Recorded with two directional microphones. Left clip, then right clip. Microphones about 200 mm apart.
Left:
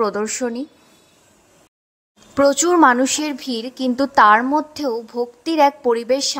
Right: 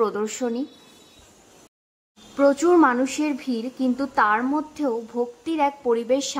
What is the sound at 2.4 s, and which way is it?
A woman's voice, 25° left (ahead or behind).